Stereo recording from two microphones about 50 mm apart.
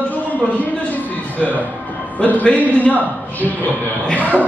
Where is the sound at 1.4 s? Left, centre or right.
Left.